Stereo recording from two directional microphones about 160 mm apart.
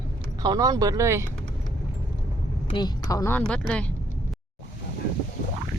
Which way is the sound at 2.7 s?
25° left (ahead or behind).